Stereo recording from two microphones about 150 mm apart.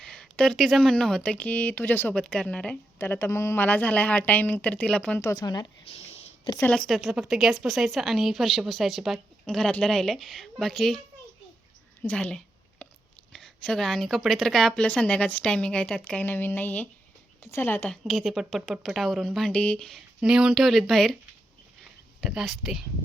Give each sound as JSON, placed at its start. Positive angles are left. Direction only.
{"t": 0.0, "sound": "speech", "side_deg": 5}
{"t": 5.3, "sound": "a woman's voice", "side_deg": 25}
{"t": 5.9, "sound": "a sound", "side_deg": 45}
{"t": 6.6, "sound": "a woman's voice", "side_deg": 5}
{"t": 12.0, "sound": "a woman's voice", "side_deg": 10}
{"t": 22.2, "sound": "a woman's voice", "side_deg": 0}